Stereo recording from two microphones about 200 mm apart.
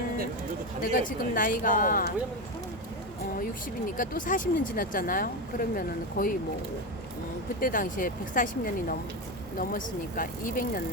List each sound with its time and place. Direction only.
0.8 s speech: 45° left (ahead or behind)
3.8 s speech: 45° left (ahead or behind)
7.6 s speech: 45° left (ahead or behind)